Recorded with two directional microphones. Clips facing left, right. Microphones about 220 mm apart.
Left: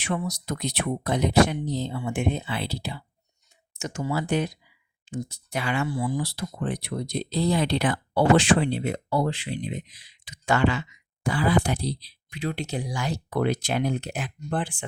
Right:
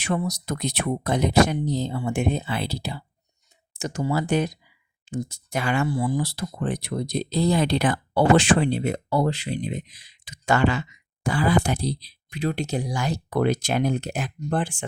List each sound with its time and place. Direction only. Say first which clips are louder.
0.0 s speech: right 3 dB; 40° right (ahead or behind)